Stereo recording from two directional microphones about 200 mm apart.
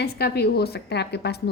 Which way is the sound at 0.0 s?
55° left (ahead or behind).